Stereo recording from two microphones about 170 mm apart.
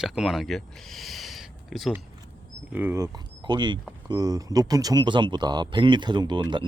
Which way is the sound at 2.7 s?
15° right (ahead or behind).